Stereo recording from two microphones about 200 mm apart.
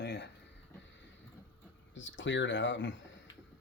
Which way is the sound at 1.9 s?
65° left (ahead or behind).